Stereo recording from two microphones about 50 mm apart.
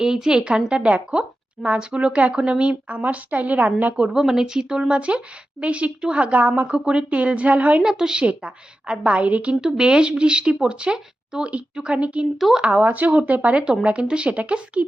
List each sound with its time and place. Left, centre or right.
0.0 s a woman's voice: centre; by 3.7 s right
4.1 s speech: centre; by 7.8 s right
7.8 s speech: centre
9.6 s speech: centre
12.2 s speech: centre
12.5 s speech: centre
12.8 s speech: right